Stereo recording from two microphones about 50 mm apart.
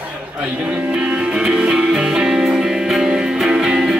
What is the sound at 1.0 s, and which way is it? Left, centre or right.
Music, right.